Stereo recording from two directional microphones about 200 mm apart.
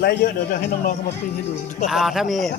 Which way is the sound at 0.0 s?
45° left (ahead or behind).